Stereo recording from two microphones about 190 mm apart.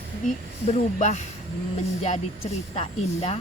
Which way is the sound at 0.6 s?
40° left (ahead or behind).